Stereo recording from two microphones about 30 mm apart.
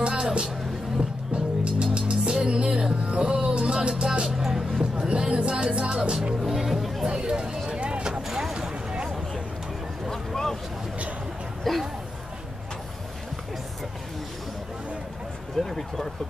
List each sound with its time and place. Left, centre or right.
0.0 s music: right
1.8 s music: right
3.9 s music: right
4.4 s music: centre
4.9 s music: right
6.4 s music: centre
7.1 s a sound: right
7.8 s vehicle: right
8.1 s vehicle: centre
8.5 s a sound: right
10.0 s boat: centre
11.7 s a sound: centre
15.5 s a sound: centre